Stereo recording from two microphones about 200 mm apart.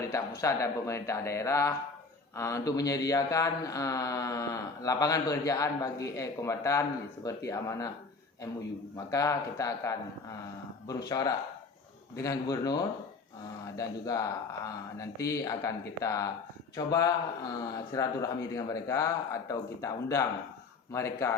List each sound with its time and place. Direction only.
0.1 s speech: 15° left (ahead or behind)
9.0 s a man's voice: 15° left (ahead or behind)